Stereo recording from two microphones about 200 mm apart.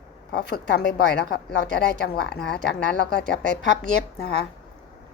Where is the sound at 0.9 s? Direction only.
55° left (ahead or behind).